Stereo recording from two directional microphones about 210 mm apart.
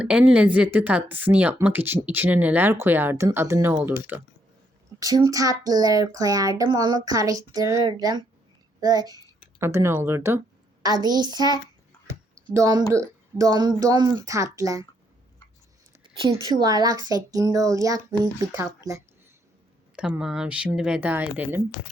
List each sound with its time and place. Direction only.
0.0 s a child's voice: 5° right (ahead or behind)
16.0 s speech: 20° right (ahead or behind)
20.0 s speech: 5° right (ahead or behind)